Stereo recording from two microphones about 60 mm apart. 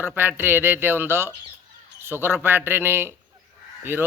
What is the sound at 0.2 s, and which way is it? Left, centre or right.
Speech, right.